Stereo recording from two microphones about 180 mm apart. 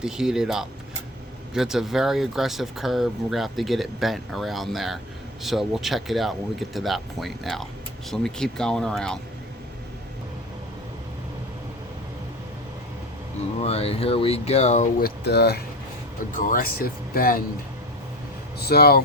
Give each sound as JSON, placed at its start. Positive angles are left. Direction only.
{"t": 0.0, "sound": "speech", "side_deg": -5}
{"t": 13.6, "sound": "speech", "side_deg": 35}
{"t": 15.0, "sound": "speech", "side_deg": 65}
{"t": 16.5, "sound": "speech", "side_deg": 55}
{"t": 18.7, "sound": "speech", "side_deg": 60}